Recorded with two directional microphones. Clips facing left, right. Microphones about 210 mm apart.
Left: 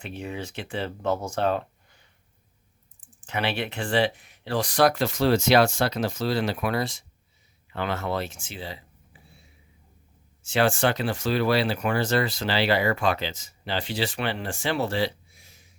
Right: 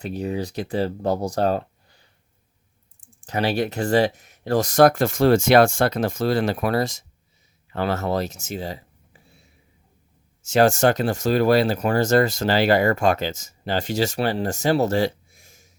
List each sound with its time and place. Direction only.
0.0 s speech: 40° right (ahead or behind)
3.2 s speech: 40° right (ahead or behind)
10.4 s speech: 45° right (ahead or behind)